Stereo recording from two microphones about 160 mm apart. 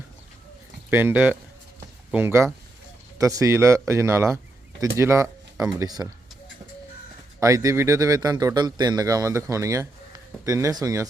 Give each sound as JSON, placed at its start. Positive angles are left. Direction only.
{"t": 0.9, "sound": "speech", "side_deg": -15}
{"t": 7.3, "sound": "speech", "side_deg": -20}